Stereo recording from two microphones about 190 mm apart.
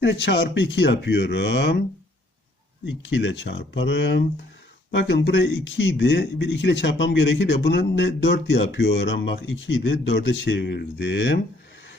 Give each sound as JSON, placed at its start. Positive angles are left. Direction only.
{"t": 0.0, "sound": "speech", "side_deg": 65}
{"t": 2.8, "sound": "speech", "side_deg": 75}